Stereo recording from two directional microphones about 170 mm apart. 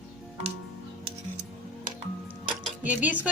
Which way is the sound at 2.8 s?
10° right (ahead or behind).